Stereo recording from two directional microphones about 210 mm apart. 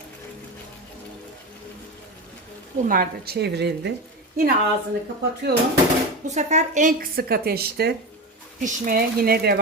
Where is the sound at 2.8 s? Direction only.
40° right (ahead or behind).